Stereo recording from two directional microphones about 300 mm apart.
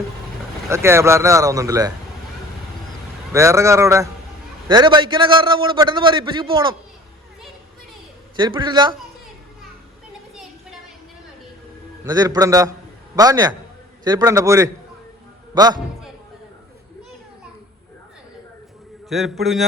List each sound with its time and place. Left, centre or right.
0.7 s a man's voice: centre
3.3 s a man's voice: centre
8.4 s a man's voice: centre
12.0 s a man's voice: centre
19.0 s a man's voice: centre